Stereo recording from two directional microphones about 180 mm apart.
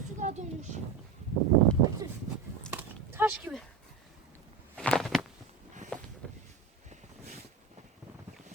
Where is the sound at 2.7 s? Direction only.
10° right (ahead or behind).